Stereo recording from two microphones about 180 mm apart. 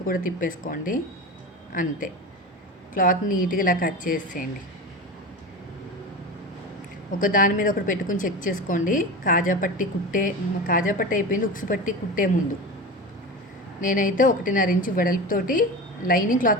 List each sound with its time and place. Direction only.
0.0 s a woman's voice: 50° left (ahead or behind)
7.2 s a woman's voice: 50° left (ahead or behind)
13.8 s a woman's voice: 45° left (ahead or behind)